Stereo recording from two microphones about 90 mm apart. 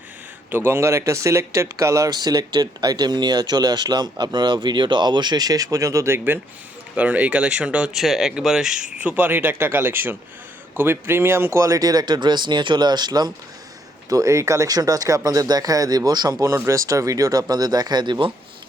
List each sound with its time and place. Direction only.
0.5 s speech: 25° right (ahead or behind)
6.1 s speech: 25° right (ahead or behind)
7.9 s speech: 5° right (ahead or behind); by 13.3 s 50° right (ahead or behind)
14.1 s speech: 35° right (ahead or behind)
16.6 s speech: 35° right (ahead or behind); by 18.3 s 55° right (ahead or behind)